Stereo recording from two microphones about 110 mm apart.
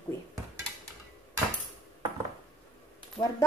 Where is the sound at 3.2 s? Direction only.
15° left (ahead or behind).